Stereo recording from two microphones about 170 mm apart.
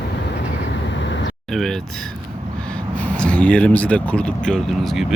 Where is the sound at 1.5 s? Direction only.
Centre (ahead or behind).